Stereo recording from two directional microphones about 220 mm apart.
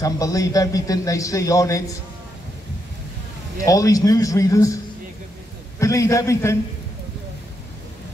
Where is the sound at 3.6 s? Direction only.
15° left (ahead or behind).